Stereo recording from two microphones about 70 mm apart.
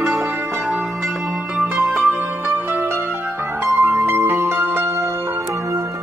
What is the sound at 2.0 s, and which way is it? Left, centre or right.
Music, right.